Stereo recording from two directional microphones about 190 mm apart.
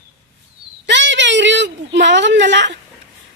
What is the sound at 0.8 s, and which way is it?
Speech, 70° right (ahead or behind).